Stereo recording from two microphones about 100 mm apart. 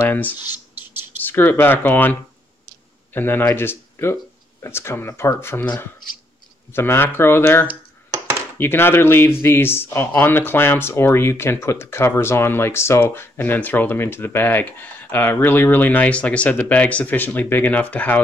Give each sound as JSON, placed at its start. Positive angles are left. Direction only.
{"t": 0.1, "sound": "speech", "side_deg": 20}